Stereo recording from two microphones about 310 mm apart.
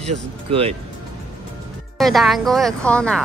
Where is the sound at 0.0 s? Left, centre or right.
Centre.